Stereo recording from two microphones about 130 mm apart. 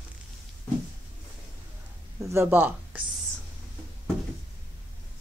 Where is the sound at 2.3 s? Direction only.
15° right (ahead or behind).